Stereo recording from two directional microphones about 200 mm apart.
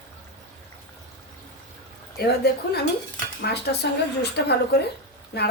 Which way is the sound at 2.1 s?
55° left (ahead or behind).